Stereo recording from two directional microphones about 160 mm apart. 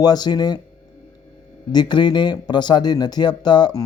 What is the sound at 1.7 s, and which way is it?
Speech, 25° left (ahead or behind).